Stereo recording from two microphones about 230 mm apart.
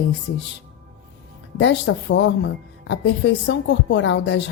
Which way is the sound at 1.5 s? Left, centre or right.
Left.